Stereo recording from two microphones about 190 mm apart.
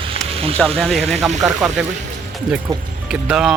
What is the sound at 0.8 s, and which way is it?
Speech, centre (ahead or behind).